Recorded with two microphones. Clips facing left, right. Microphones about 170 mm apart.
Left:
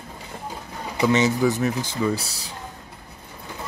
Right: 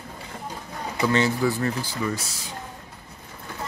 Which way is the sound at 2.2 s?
35° left (ahead or behind).